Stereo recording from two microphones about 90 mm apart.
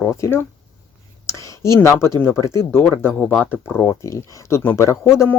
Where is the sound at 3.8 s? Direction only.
35° left (ahead or behind).